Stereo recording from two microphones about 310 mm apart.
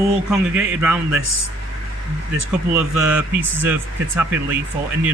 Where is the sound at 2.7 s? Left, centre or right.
Centre.